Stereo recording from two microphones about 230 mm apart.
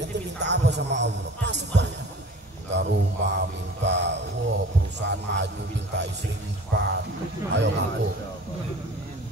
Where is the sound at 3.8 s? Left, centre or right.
Right.